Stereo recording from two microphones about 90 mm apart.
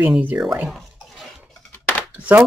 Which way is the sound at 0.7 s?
Centre (ahead or behind).